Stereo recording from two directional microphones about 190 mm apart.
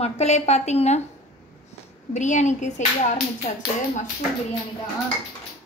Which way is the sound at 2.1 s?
40° left (ahead or behind).